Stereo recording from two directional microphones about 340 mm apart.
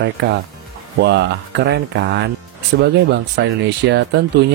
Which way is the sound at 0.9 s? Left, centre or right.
Right.